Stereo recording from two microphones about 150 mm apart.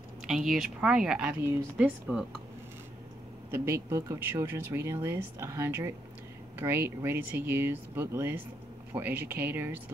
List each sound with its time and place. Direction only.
0.3 s speech: centre (ahead or behind)
3.5 s speech: 15° right (ahead or behind)